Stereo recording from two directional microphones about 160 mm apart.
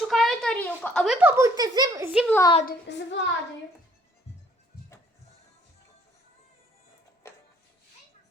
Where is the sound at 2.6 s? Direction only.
90° left.